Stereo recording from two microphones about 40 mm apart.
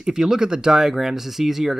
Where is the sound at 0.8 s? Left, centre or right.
Centre.